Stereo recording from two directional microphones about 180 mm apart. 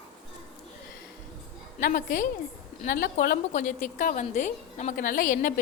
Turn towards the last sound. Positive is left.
turn(degrees=50)  # may be behind; listen again after turning